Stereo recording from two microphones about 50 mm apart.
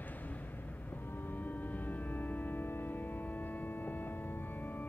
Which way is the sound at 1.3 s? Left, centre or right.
Left.